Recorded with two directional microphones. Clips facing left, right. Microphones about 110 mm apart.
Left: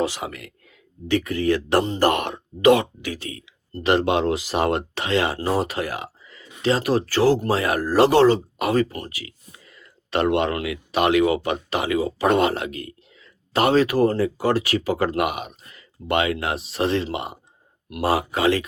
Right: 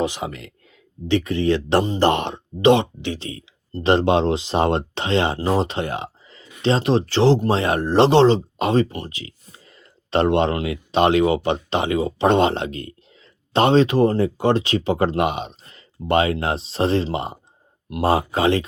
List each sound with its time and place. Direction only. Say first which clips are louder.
0.0 s speech: right 1 dB; 20° right (ahead or behind)